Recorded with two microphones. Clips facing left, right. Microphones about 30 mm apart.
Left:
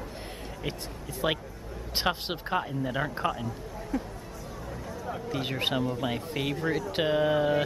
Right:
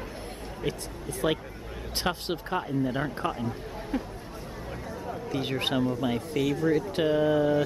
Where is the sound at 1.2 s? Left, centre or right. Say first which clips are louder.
Right 1 dB; centre.